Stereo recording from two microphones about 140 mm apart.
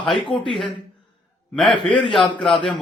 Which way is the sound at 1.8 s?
Centre (ahead or behind).